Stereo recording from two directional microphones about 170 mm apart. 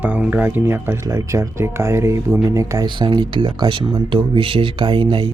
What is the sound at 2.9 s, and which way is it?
Speech, 30° right (ahead or behind).